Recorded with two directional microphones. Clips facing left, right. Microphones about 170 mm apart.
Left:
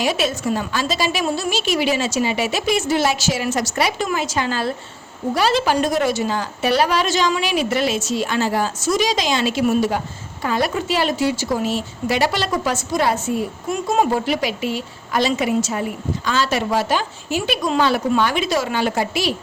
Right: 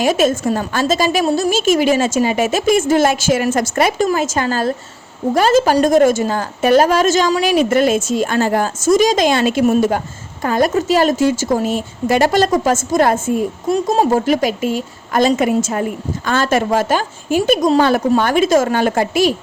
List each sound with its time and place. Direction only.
0.0 s a woman's voice: 45° right (ahead or behind)
13.7 s a woman's voice: 35° right (ahead or behind)